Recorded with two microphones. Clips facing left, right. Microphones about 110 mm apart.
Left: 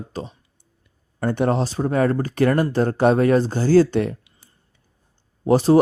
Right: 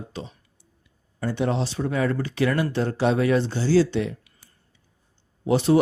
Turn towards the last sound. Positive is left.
turn(degrees=40)  # may be behind; listen again after turning